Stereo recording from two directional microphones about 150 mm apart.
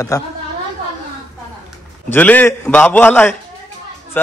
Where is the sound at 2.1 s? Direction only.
10° left (ahead or behind).